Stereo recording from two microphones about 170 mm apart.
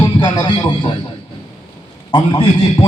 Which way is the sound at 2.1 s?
30° left (ahead or behind).